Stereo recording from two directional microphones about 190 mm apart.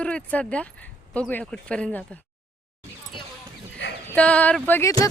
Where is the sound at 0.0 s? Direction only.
5° left (ahead or behind).